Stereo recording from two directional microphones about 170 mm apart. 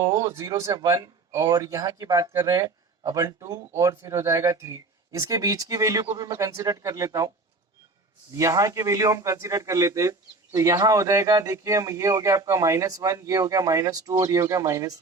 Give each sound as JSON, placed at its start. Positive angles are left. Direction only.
{"t": 0.0, "sound": "a man's voice", "side_deg": -20}
{"t": 8.4, "sound": "a man's voice", "side_deg": -20}